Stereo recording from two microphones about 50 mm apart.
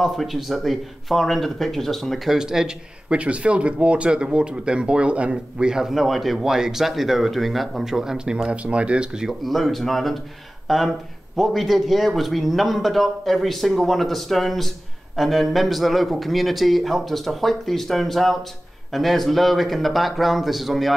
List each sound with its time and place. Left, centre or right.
0.0 s a man's voice: centre
3.2 s speech: right
8.5 s speech: right
9.4 s a man's voice: centre